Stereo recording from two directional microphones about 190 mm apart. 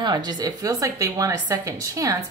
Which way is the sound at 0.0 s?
20° right (ahead or behind).